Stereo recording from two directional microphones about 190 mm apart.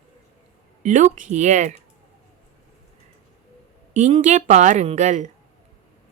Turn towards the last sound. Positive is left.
turn(degrees=-40)  # may be behind; listen again after turning